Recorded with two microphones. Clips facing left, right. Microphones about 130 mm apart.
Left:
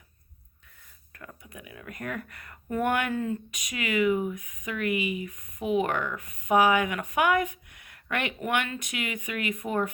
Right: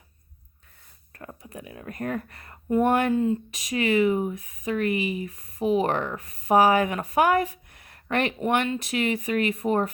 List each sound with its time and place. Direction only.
1.1 s speech: 35° right (ahead or behind)